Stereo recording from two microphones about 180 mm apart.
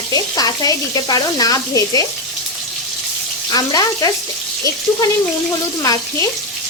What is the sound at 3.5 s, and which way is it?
Frying, 20° left (ahead or behind).